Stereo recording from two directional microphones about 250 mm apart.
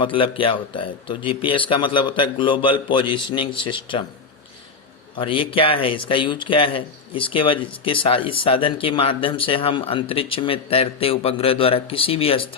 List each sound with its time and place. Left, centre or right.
0.0 s speech: left
5.1 s speech: left